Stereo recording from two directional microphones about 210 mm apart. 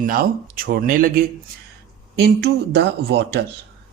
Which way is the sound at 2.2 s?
50° right (ahead or behind).